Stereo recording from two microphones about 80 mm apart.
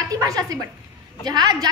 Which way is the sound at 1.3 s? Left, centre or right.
Right.